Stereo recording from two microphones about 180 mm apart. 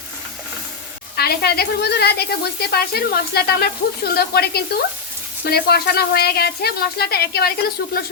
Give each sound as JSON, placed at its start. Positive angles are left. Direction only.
{"t": 1.1, "sound": "speech", "side_deg": 60}